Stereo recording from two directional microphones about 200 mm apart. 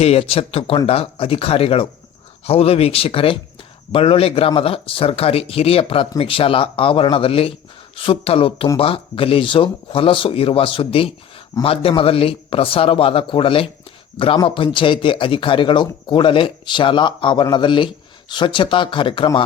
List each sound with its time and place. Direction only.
0.0 s speech: 30° left (ahead or behind)